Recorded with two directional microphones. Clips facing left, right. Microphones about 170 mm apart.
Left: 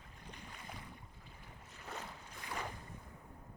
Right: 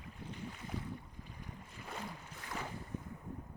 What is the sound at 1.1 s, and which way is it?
Boat, 15° right (ahead or behind).